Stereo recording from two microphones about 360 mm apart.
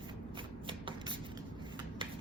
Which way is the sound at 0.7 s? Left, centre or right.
Centre.